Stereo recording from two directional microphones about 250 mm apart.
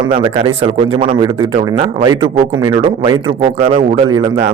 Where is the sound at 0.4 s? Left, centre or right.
Right.